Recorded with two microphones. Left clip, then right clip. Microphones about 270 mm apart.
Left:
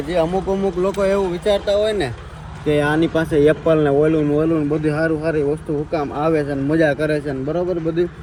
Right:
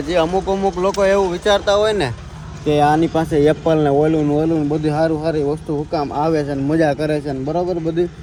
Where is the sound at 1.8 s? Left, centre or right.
Centre.